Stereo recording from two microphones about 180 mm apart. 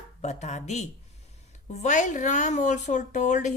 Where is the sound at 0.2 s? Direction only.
40° left (ahead or behind).